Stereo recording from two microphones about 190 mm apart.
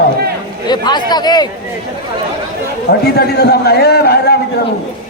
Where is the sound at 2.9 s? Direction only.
60° left (ahead or behind).